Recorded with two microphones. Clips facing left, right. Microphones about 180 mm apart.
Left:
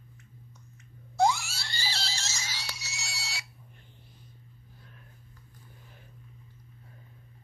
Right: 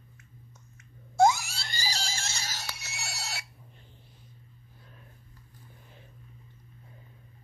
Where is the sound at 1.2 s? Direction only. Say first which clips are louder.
Right 3 dB; 45° right (ahead or behind).